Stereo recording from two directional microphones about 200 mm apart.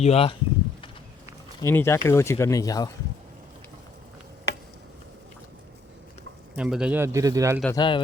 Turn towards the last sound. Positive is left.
turn(degrees=20)  # may be behind; listen again after turning